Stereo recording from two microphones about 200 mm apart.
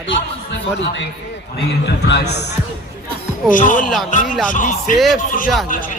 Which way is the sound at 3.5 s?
40° left (ahead or behind).